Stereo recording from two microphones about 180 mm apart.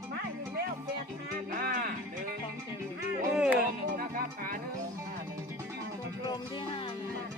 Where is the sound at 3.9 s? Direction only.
50° right (ahead or behind).